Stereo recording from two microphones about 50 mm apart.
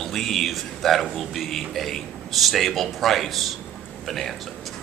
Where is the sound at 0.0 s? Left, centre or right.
Centre.